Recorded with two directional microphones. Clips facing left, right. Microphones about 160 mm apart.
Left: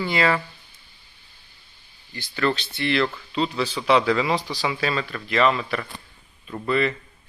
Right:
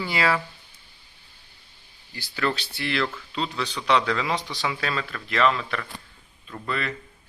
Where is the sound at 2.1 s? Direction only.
5° right (ahead or behind).